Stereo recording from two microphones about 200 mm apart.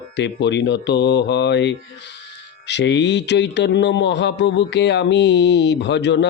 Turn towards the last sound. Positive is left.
turn(degrees=60)  # may be behind; listen again after turning